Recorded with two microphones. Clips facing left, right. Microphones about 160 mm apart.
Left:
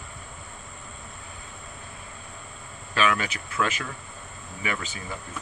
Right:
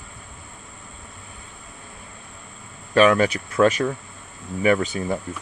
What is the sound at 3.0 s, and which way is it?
Speech, 45° right (ahead or behind).